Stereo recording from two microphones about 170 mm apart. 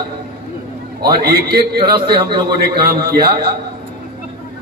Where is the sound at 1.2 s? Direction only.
65° right (ahead or behind).